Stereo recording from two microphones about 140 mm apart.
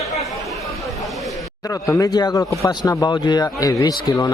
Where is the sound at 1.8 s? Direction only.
25° left (ahead or behind).